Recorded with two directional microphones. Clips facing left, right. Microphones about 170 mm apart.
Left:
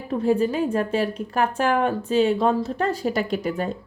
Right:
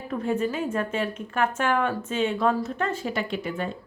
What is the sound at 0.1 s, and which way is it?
A woman's voice, 30° left (ahead or behind).